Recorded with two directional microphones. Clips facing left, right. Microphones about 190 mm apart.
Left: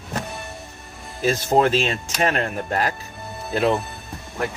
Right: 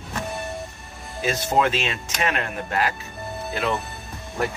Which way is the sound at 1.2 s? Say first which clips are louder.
Left 3 dB; 40° left (ahead or behind).